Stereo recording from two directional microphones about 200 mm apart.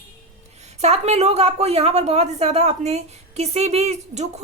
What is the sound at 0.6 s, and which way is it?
A woman's voice, 35° right (ahead or behind).